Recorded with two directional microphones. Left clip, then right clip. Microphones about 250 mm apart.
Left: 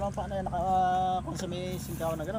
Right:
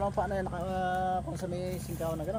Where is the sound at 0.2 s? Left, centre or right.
Right.